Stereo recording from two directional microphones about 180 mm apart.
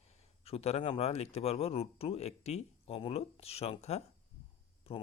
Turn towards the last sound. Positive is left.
turn(degrees=30)  # may be behind; listen again after turning